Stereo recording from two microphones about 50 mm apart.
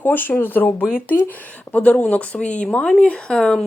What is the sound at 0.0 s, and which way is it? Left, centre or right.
A woman's voice, left.